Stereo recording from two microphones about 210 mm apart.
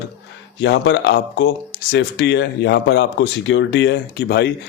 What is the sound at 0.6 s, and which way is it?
Speech, 55° left (ahead or behind).